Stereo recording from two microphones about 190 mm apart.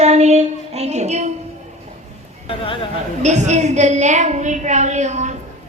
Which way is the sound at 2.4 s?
30° left (ahead or behind).